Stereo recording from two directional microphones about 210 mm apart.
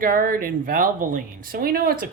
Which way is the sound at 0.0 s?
40° right (ahead or behind).